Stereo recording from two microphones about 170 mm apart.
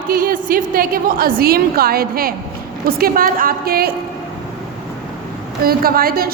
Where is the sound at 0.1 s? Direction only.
55° right (ahead or behind).